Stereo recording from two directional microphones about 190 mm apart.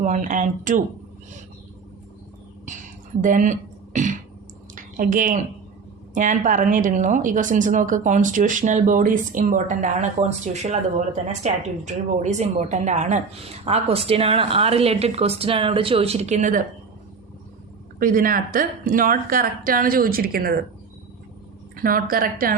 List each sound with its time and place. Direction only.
0.0 s a woman's voice: 45° right (ahead or behind)
2.6 s a sound: 40° right (ahead or behind)
6.1 s a woman's voice: 45° right (ahead or behind)
18.0 s a woman's voice: 45° right (ahead or behind)
21.8 s a woman's voice: 50° right (ahead or behind)